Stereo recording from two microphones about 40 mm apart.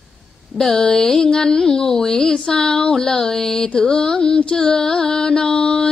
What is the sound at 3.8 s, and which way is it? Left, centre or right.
Music, centre.